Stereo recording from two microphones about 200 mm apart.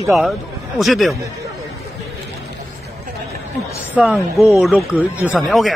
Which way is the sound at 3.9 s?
5° right (ahead or behind).